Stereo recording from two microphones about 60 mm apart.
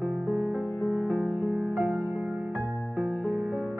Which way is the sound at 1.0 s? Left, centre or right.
Right.